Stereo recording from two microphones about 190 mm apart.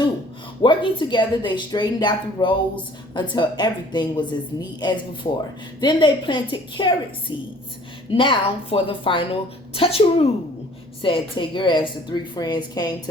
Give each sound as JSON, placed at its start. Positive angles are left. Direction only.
{"t": 0.6, "sound": "speech", "side_deg": 25}